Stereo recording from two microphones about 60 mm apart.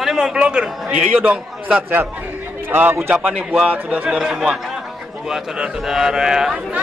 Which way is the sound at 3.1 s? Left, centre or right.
Centre.